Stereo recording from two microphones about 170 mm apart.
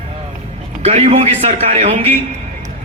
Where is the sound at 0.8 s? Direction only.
40° right (ahead or behind).